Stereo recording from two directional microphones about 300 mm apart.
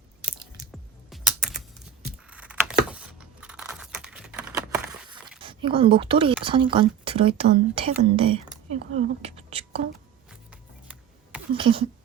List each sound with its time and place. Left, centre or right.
0.7 s music: centre
2.3 s computer keyboard: centre
5.4 s a woman's voice: centre
10.5 s camera: centre
11.5 s speech: centre